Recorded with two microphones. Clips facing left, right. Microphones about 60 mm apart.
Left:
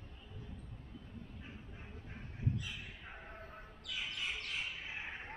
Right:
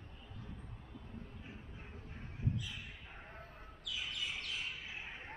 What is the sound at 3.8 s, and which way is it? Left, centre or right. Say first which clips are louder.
Bird: left 1 dB; left.